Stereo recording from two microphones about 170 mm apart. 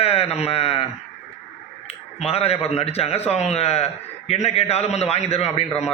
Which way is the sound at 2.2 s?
35° left (ahead or behind).